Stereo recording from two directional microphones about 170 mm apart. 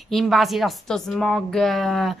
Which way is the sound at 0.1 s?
Centre (ahead or behind).